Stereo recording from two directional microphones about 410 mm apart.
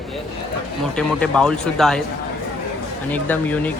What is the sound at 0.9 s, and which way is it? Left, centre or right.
Speech, centre.